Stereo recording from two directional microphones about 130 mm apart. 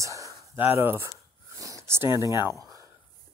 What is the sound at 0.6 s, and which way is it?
Speech, 15° right (ahead or behind).